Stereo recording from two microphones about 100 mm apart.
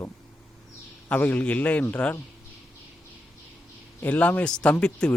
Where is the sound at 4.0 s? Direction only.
15° left (ahead or behind).